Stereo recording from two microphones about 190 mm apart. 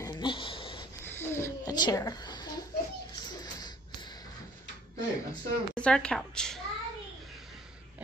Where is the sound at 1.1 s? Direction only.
10° left (ahead or behind).